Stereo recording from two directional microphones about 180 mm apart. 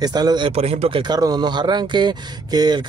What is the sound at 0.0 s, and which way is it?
Speech, 20° right (ahead or behind).